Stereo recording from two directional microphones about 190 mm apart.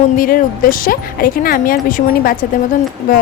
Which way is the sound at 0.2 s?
50° left (ahead or behind).